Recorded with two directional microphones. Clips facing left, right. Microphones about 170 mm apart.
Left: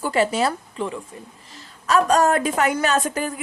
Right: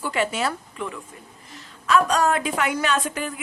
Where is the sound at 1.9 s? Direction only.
45° left (ahead or behind).